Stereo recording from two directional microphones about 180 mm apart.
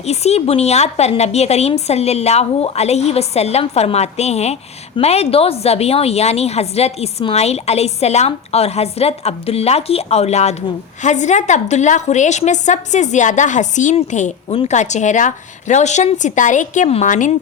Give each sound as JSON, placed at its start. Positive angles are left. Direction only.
{"t": 0.0, "sound": "a woman's voice", "side_deg": 35}